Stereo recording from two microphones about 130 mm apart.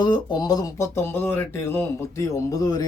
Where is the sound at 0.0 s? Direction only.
35° left (ahead or behind).